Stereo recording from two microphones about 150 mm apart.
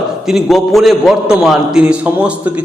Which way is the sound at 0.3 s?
Centre (ahead or behind).